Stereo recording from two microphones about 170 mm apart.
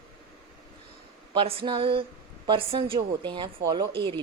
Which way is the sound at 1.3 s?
30° right (ahead or behind).